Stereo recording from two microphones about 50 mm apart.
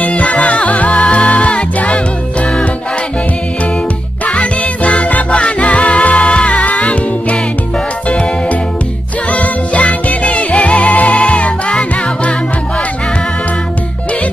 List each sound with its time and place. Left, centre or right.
0.0 s music: left
4.3 s music: left
9.3 s music: left